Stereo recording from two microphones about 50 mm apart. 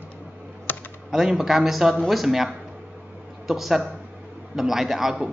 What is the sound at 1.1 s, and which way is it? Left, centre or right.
A woman's voice, centre.